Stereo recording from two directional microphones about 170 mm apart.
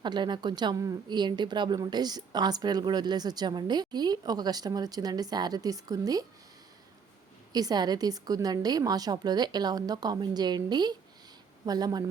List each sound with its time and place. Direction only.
0.0 s a woman's voice: 25° right (ahead or behind)
7.5 s a woman's voice: 25° right (ahead or behind)